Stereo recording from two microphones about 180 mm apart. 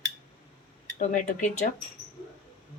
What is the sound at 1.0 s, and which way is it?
Speech, 45° left (ahead or behind).